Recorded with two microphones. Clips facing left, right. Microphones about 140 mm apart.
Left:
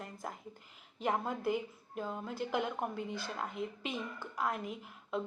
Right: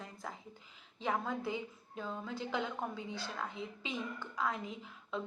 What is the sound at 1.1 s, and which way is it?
A woman's voice, 15° left (ahead or behind).